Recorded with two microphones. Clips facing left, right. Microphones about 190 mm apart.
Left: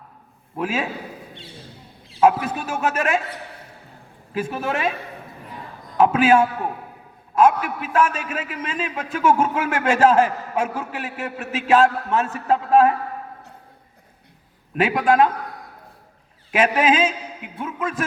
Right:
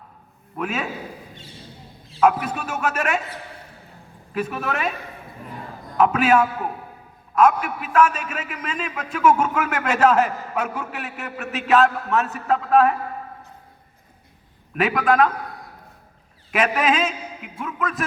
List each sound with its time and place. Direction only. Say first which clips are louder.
0.5 s a man's voice: left 2 dB; 30° left (ahead or behind)
2.2 s a man's voice: left 2 dB; 30° left (ahead or behind)
4.4 s a man's voice: left 1 dB; 30° left (ahead or behind)
6.0 s a man's voice: left 2 dB; 30° left (ahead or behind)
7.9 s a man's voice: right 2 dB; 30° left (ahead or behind)
14.8 s a man's voice: left 1 dB; 30° left (ahead or behind)
16.5 s a man's voice: left 2 dB; 30° left (ahead or behind)